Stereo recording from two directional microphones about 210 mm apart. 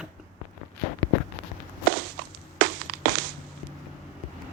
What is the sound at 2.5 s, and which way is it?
Crushing, 55° right (ahead or behind).